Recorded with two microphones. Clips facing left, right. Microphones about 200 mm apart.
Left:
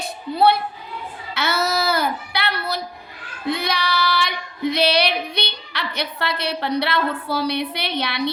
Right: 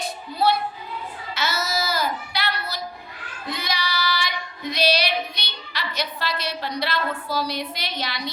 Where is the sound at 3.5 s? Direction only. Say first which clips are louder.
Left 6 dB; 60° left (ahead or behind).